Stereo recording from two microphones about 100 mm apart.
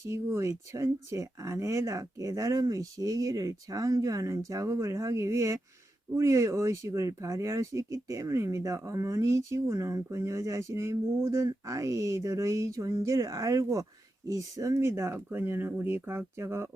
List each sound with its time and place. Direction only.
0.0 s speech: 30° right (ahead or behind)